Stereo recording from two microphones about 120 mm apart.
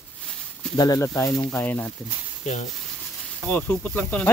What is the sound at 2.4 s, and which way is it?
Speech, 70° left (ahead or behind).